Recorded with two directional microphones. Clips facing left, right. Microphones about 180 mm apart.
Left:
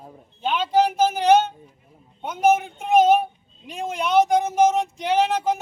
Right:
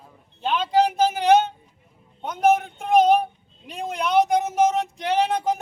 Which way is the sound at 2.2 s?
5° left (ahead or behind).